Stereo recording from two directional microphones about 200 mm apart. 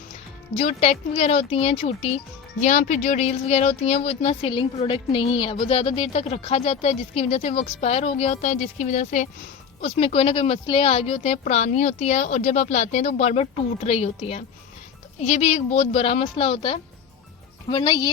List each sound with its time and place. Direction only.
0.5 s speech: 30° left (ahead or behind)